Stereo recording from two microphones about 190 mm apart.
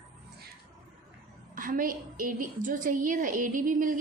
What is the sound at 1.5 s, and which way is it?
A woman's voice, 45° right (ahead or behind).